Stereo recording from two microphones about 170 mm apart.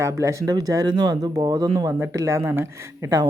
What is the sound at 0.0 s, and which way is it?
Speech, 15° right (ahead or behind).